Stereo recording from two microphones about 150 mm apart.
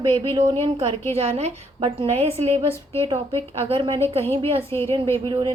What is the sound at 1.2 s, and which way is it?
A woman's voice, 45° right (ahead or behind).